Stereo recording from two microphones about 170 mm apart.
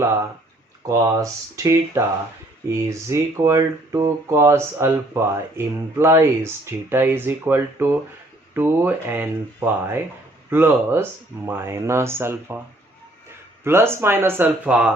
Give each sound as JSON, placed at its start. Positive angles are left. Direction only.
{"t": 0.9, "sound": "speech", "side_deg": -20}
{"t": 13.7, "sound": "speech", "side_deg": -15}